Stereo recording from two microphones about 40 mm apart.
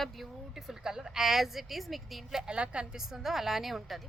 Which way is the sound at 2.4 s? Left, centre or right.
Right.